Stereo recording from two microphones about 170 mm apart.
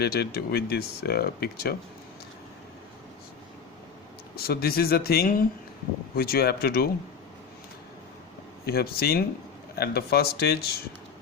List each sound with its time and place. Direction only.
0.0 s speech: 70° left (ahead or behind)
4.4 s speech: 65° left (ahead or behind)
8.6 s speech: 65° left (ahead or behind)